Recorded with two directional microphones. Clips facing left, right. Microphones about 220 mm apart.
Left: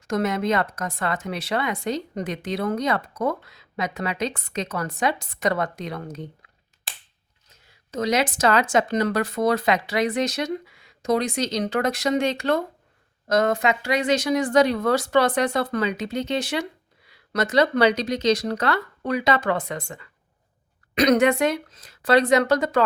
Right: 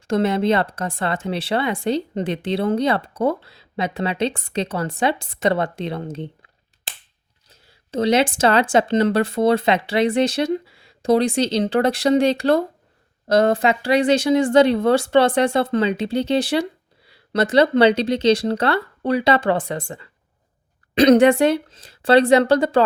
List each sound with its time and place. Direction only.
0.1 s speech: 30° right (ahead or behind)
7.4 s speech: 30° right (ahead or behind)